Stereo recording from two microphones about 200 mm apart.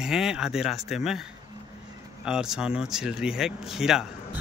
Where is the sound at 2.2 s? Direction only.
5° right (ahead or behind).